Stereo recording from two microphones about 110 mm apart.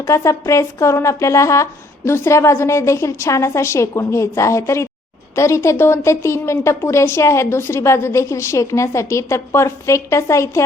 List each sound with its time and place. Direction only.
0.0 s speech: 25° left (ahead or behind)